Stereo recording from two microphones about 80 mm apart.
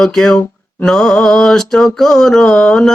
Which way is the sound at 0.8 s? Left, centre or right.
Centre.